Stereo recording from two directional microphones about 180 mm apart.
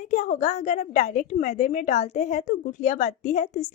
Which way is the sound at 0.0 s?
45° left (ahead or behind).